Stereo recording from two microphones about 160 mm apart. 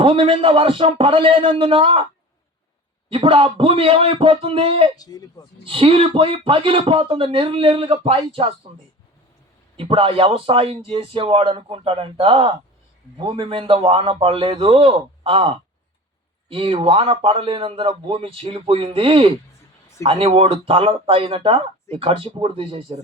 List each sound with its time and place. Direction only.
0.0 s speech: 35° right (ahead or behind)
3.1 s speech: 35° right (ahead or behind)
4.9 s speech: 25° left (ahead or behind)
5.6 s speech: 35° right (ahead or behind)
9.7 s speech: 35° right (ahead or behind)